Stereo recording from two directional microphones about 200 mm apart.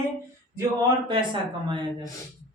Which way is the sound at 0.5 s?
20° right (ahead or behind).